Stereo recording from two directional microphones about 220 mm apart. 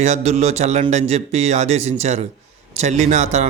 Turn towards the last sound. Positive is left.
turn(degrees=-30)  # may be behind; listen again after turning